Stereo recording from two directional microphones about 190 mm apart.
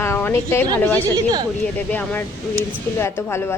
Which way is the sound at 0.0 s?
10° left (ahead or behind).